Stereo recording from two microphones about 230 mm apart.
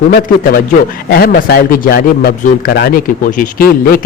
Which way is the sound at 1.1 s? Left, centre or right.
Left.